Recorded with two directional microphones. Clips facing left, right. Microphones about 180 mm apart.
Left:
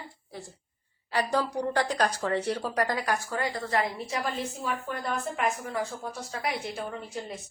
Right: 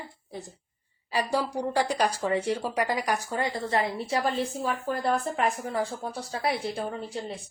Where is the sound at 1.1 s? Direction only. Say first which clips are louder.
Even; 10° right (ahead or behind).